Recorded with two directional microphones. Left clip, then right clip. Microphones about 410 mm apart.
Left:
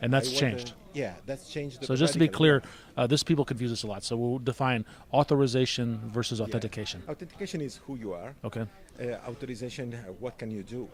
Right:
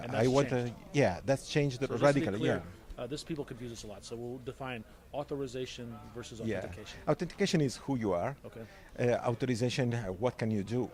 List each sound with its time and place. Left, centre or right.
0.0 s speech: left
0.5 s speech: right
2.4 s speech: left
7.1 s speech: right